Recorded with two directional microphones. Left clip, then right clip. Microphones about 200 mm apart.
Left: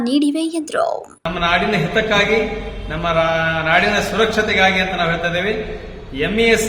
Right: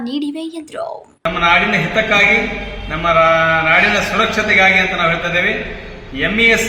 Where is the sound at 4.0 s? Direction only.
30° left (ahead or behind).